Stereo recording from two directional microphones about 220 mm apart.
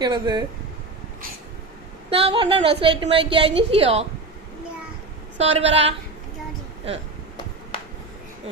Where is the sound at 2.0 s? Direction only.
25° right (ahead or behind).